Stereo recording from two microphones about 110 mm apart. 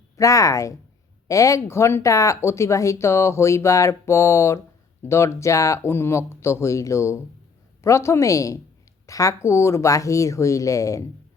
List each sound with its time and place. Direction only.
0.2 s speech: 30° left (ahead or behind)